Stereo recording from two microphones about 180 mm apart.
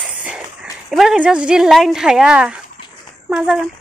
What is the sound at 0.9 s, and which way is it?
Speech, 5° right (ahead or behind).